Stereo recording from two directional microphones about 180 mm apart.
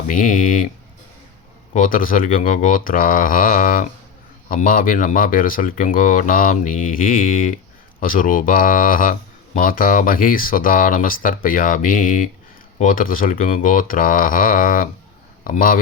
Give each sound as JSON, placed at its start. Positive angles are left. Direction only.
{"t": 0.1, "sound": "speech", "side_deg": 45}
{"t": 1.7, "sound": "speech", "side_deg": 50}